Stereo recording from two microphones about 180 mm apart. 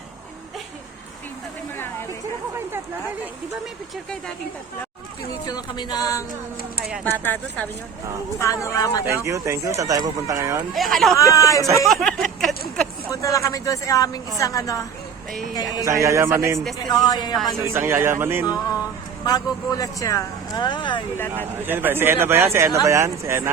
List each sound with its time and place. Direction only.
5.5 s speech: 20° left (ahead or behind)
7.0 s speech: 10° left (ahead or behind)
9.0 s speech: 15° right (ahead or behind)
10.8 s speech: centre (ahead or behind)
11.2 s speech: 20° left (ahead or behind)
11.9 s a sound: centre (ahead or behind)
13.1 s speech: 20° left (ahead or behind)
15.3 s speech: centre (ahead or behind)
15.8 s speech: 15° right (ahead or behind)
16.8 s speech: 20° left (ahead or behind)
17.6 s speech: 15° right (ahead or behind)
18.4 s speech: 20° left (ahead or behind)
21.7 s speech: 10° right (ahead or behind)